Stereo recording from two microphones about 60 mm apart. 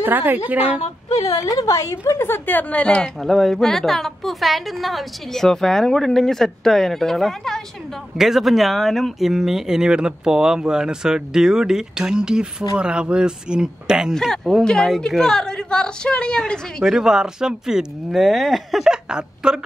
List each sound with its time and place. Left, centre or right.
0.0 s a woman's voice: right
1.1 s speech: left
2.1 s a woman's voice: left
2.8 s a woman's voice: centre
3.2 s a woman's voice: centre
14.1 s a woman's voice: centre
16.8 s a woman's voice: centre
18.9 s speech: centre